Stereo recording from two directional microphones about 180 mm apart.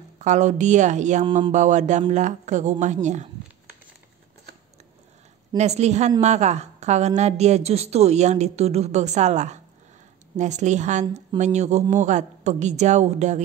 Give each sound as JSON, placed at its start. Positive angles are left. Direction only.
{"t": 0.2, "sound": "a woman's voice", "side_deg": -40}
{"t": 5.6, "sound": "a woman's voice", "side_deg": -40}